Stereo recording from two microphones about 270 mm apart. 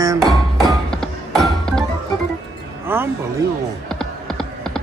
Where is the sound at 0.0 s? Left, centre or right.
Centre.